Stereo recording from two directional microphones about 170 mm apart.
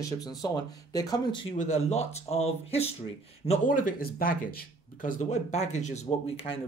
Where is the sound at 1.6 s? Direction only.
40° left (ahead or behind).